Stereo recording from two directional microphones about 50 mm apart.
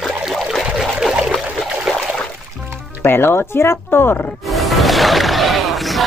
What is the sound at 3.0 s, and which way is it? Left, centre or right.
Speech, left.